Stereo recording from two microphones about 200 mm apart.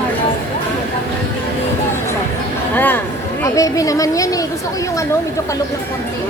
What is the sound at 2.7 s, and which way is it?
Speech, 10° left (ahead or behind).